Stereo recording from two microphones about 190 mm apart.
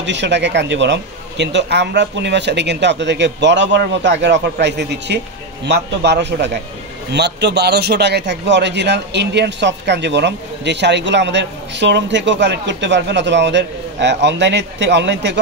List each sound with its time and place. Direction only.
0.0 s a man's voice: 70° right (ahead or behind)